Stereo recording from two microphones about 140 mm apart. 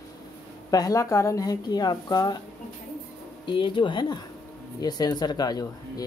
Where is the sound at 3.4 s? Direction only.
35° left (ahead or behind).